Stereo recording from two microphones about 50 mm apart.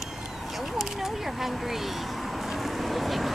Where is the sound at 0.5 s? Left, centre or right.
Centre.